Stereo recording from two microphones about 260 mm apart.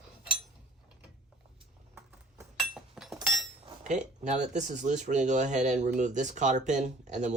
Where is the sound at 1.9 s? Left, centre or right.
Centre.